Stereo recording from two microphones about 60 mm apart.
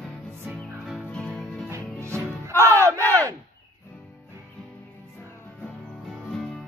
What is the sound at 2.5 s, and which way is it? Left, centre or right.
Battle cry, right.